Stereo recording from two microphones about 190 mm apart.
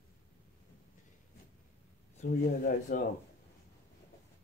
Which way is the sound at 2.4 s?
45° left (ahead or behind).